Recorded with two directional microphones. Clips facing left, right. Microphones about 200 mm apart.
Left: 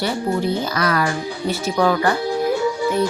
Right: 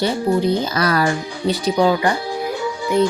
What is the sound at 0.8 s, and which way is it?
Speech, 35° right (ahead or behind).